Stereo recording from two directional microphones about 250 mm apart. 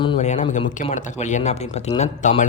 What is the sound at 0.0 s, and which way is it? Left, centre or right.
Speech, left.